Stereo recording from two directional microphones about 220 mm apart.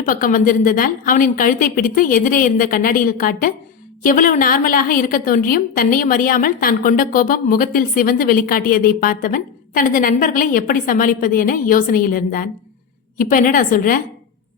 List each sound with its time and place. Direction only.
0.1 s a woman's voice: 40° left (ahead or behind)